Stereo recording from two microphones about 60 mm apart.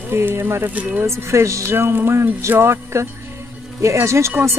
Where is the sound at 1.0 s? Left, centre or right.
Right.